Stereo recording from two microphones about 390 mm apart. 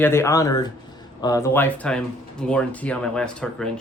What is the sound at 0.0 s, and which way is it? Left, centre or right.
Speech, centre.